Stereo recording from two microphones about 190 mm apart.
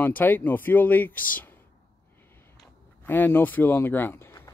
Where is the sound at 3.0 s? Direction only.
10° left (ahead or behind).